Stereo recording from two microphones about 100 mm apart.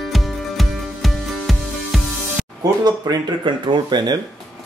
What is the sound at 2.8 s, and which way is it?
Speech, 45° right (ahead or behind).